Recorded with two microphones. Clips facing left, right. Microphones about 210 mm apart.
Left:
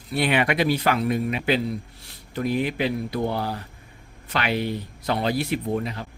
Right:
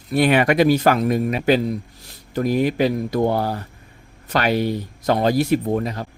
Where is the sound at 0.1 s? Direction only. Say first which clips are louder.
Right 6 dB; 45° right (ahead or behind).